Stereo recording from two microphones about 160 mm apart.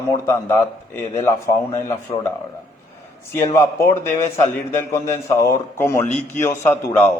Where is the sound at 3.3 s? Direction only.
15° left (ahead or behind).